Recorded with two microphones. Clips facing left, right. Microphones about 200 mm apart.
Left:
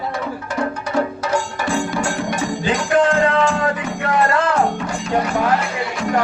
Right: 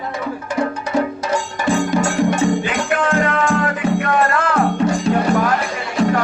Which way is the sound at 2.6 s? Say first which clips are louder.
Left 3 dB; 30° left (ahead or behind).